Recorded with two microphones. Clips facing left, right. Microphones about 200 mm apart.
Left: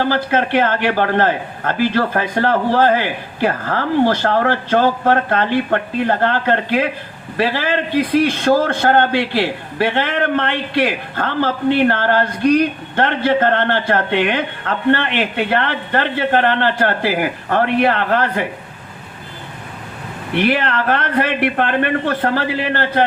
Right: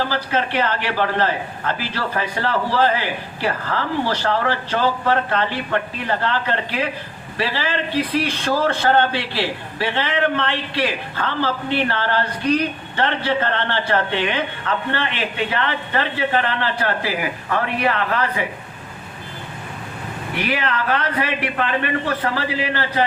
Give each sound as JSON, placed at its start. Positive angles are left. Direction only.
{"t": 0.0, "sound": "a man's voice", "side_deg": 55}
{"t": 20.5, "sound": "a man's voice", "side_deg": 55}